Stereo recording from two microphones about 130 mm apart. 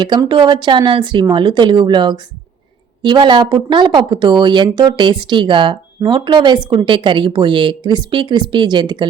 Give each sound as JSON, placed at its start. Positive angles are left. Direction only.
{"t": 0.0, "sound": "speech", "side_deg": -35}